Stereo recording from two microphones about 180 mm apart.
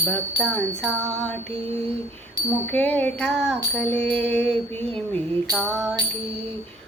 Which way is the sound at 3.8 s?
35° right (ahead or behind).